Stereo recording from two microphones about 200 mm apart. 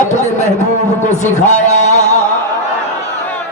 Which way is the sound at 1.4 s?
35° left (ahead or behind).